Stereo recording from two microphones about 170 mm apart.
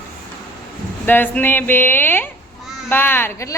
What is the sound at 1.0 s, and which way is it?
A man's voice, 10° left (ahead or behind).